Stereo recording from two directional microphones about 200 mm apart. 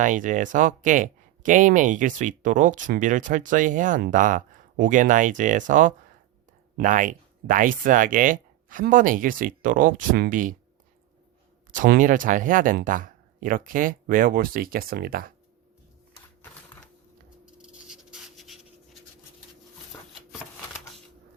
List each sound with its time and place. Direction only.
0.0 s speech: 40° right (ahead or behind)
11.7 s speech: 40° right (ahead or behind)
17.4 s writing: 5° right (ahead or behind)